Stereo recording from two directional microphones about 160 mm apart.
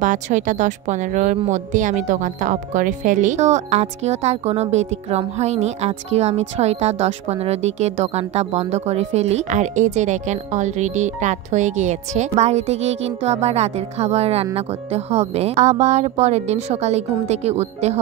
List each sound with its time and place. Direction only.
0.0 s speech: 50° right (ahead or behind)